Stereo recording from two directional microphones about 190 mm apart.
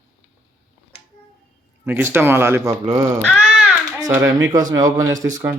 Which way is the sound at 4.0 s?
15° right (ahead or behind).